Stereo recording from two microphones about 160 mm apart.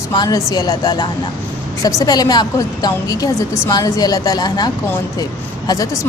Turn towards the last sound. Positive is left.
turn(degrees=25)  # may be behind; listen again after turning